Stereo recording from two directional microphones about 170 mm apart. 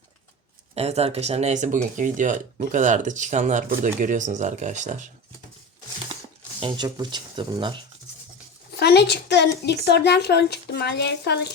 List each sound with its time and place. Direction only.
0.7 s speech: 40° right (ahead or behind)
6.6 s speech: 25° right (ahead or behind)
8.7 s a woman's voice: 75° left (ahead or behind)